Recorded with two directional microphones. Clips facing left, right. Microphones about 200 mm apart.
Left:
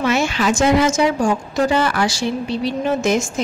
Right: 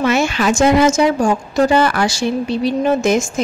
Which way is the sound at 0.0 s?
55° right (ahead or behind).